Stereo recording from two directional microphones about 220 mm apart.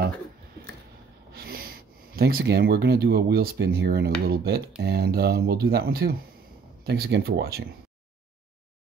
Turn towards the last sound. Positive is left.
turn(degrees=-45)  # may be behind; listen again after turning